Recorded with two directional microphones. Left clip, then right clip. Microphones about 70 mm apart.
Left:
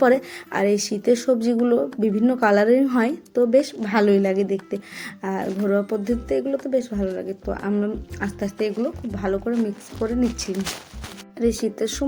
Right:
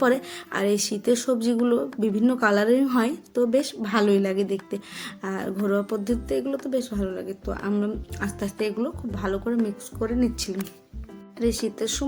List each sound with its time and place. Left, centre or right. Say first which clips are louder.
0.0 s speech: left 5 dB; right
3.8 s a sound: left 3 dB; right
5.6 s speech: left 3 dB; right
7.6 s speech: left 2 dB; right
8.2 s speech: left 3 dB; right
10.3 s a sound: left 3 dB; right
11.3 s speech: left 3 dB; centre